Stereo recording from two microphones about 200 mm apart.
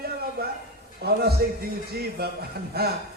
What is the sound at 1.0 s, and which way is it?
A man's voice, 50° right (ahead or behind).